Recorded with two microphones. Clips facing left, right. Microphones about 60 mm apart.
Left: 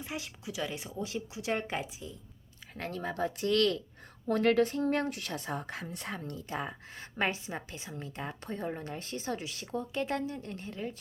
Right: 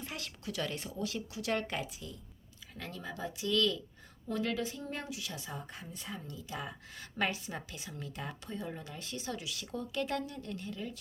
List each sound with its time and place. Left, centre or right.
0.0 s speech: centre
2.7 s a woman's voice: left
5.6 s a woman's voice: left
6.0 s a woman's voice: left
6.5 s speech: left
8.5 s speech: left